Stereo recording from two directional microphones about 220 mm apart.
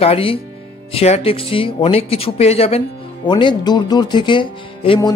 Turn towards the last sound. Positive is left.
turn(degrees=20)  # may be behind; listen again after turning